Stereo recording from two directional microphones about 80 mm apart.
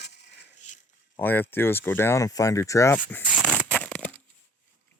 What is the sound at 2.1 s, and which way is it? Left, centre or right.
Speech, left.